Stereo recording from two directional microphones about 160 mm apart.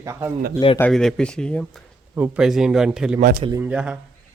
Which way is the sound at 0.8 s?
5° left (ahead or behind).